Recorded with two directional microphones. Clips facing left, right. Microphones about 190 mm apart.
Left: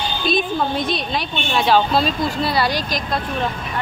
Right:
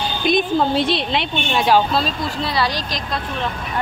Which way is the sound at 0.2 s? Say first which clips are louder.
Right 3 dB; 25° right (ahead or behind).